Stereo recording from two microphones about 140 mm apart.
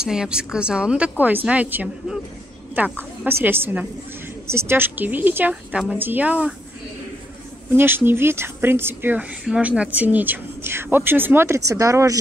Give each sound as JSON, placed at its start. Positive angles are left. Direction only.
{"t": 0.0, "sound": "a woman's voice", "side_deg": -5}
{"t": 7.7, "sound": "speech", "side_deg": -15}